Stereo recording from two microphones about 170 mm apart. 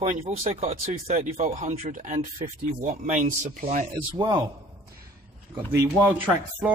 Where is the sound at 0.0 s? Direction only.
40° right (ahead or behind).